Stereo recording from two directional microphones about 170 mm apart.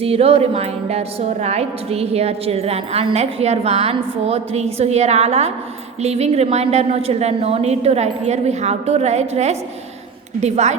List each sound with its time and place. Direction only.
0.0 s a woman's voice: 35° right (ahead or behind)